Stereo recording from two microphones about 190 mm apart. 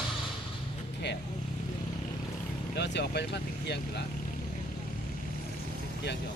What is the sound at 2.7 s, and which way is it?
Speech, 65° left (ahead or behind).